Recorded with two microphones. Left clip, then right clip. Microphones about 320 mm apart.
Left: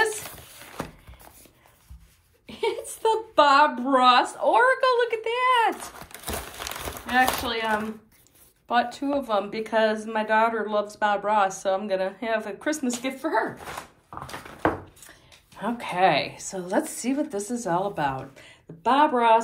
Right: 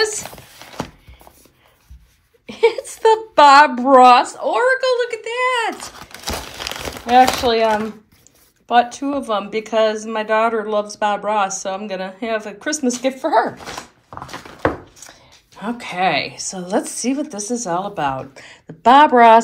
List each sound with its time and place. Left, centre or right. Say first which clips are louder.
2.4 s a sound: right 11 dB; centre
3.8 s speech: right 10 dB; centre
6.6 s crumpling: right 7 dB; centre
8.6 s speech: right 8 dB; centre
15.5 s a woman's voice: right 3 dB; centre; by 19.0 s right